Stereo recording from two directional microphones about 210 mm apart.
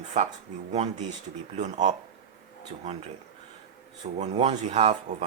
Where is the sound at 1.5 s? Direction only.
35° right (ahead or behind).